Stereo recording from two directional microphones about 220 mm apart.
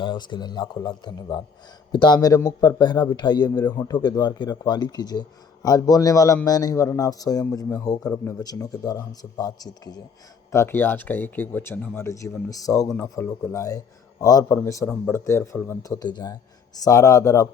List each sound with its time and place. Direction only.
0.0 s a man's voice: 20° left (ahead or behind)